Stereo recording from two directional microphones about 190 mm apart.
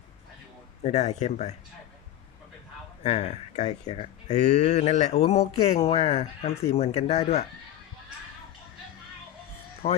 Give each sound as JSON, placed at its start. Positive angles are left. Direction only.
{"t": 0.8, "sound": "speech", "side_deg": 35}
{"t": 3.0, "sound": "speech", "side_deg": 35}
{"t": 9.8, "sound": "speech", "side_deg": 40}